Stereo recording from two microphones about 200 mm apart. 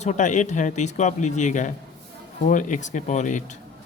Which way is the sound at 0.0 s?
35° left (ahead or behind).